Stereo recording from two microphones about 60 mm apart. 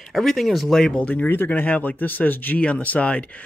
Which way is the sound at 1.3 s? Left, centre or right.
Left.